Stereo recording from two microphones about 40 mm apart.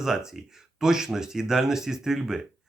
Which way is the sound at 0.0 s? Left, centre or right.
Centre.